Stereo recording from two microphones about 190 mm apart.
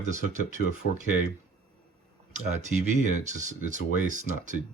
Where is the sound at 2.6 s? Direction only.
40° right (ahead or behind).